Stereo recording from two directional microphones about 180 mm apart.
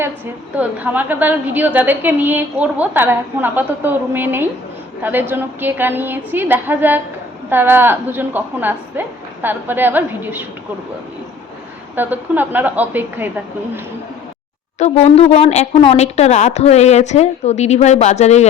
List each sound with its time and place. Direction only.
0.5 s a woman's voice: 10° right (ahead or behind)
11.9 s a woman's voice: 10° right (ahead or behind)
14.8 s speech: 40° left (ahead or behind)